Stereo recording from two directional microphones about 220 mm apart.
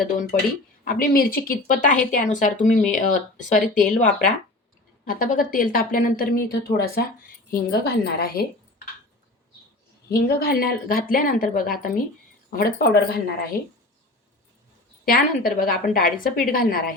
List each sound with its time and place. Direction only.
0.0 s a woman's voice: 40° left (ahead or behind)
10.1 s speech: 45° left (ahead or behind)
13.5 s a woman's voice: 40° left (ahead or behind)
15.0 s speech: 40° left (ahead or behind)